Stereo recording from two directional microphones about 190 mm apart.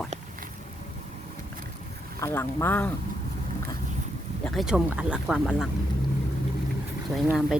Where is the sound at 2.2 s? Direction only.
15° left (ahead or behind).